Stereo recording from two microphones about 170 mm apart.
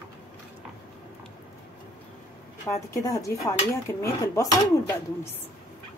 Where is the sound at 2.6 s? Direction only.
15° left (ahead or behind).